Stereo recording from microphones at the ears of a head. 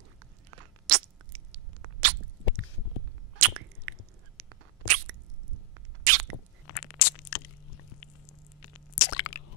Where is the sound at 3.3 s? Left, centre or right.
Right.